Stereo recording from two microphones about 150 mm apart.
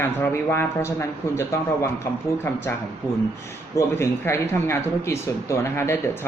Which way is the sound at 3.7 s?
15° left (ahead or behind).